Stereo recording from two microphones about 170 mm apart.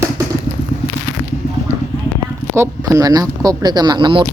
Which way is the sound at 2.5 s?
15° right (ahead or behind).